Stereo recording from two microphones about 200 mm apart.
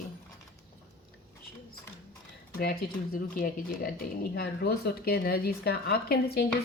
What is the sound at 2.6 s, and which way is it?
A woman's voice, 50° left (ahead or behind).